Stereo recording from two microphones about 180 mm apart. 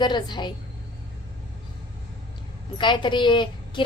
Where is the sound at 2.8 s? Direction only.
25° left (ahead or behind).